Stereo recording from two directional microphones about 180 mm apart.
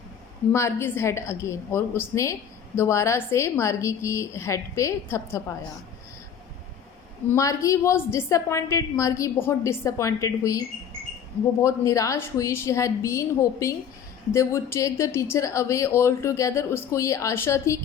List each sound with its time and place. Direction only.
0.5 s speech: 15° left (ahead or behind)
7.3 s speech: 15° left (ahead or behind)
11.6 s speech: 15° left (ahead or behind)